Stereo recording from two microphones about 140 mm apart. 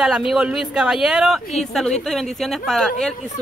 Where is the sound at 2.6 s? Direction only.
5° left (ahead or behind).